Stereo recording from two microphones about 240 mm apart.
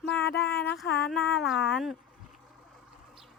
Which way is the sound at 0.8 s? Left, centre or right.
Left.